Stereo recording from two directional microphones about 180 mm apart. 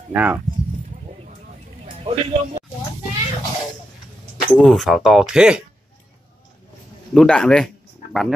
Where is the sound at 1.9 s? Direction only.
35° right (ahead or behind).